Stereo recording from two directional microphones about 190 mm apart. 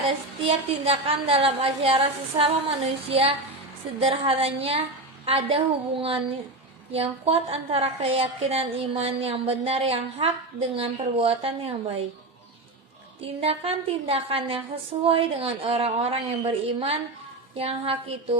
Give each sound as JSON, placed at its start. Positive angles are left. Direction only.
{"t": 0.0, "sound": "a woman's voice", "side_deg": -30}
{"t": 13.2, "sound": "a woman's voice", "side_deg": -30}